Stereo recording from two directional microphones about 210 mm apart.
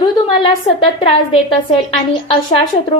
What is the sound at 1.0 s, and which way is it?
Speech, 30° left (ahead or behind).